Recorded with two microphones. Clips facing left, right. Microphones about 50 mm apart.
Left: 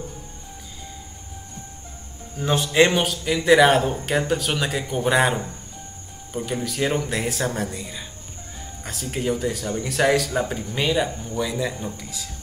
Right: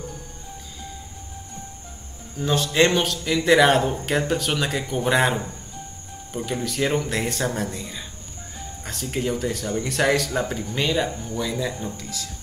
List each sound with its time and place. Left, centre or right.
2.3 s speech: centre